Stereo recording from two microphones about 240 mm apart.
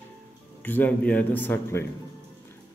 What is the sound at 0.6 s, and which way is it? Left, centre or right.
A man's voice, centre.